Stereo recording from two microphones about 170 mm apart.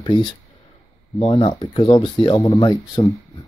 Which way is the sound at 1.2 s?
40° left (ahead or behind).